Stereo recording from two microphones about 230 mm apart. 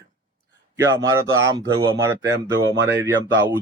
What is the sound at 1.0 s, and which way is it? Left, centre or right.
Speech, right.